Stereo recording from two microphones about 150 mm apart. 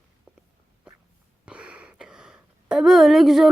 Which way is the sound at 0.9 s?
5° right (ahead or behind).